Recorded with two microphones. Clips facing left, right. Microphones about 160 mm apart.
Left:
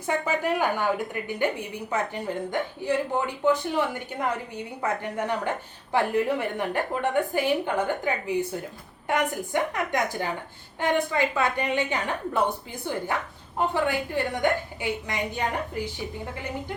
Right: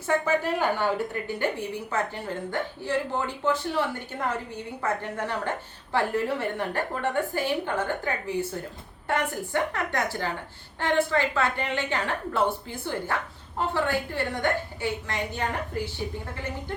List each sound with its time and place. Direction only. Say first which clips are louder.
0.3 s a woman's voice: even; 15° left (ahead or behind)